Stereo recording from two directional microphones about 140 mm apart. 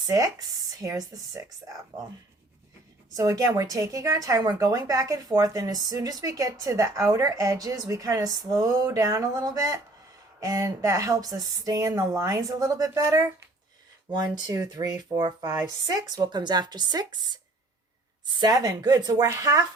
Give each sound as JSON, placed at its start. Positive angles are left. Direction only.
{"t": 0.0, "sound": "a woman's voice", "side_deg": -25}
{"t": 3.2, "sound": "a woman's voice", "side_deg": -25}